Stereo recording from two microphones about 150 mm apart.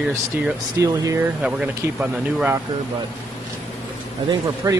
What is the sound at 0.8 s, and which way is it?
Speech, 20° right (ahead or behind).